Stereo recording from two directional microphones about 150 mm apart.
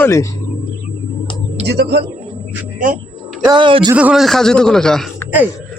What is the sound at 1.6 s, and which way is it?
Speech, 90° right.